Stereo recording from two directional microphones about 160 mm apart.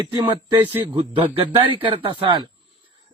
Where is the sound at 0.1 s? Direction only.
25° right (ahead or behind).